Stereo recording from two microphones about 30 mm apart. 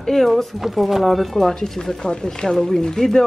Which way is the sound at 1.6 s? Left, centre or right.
Left.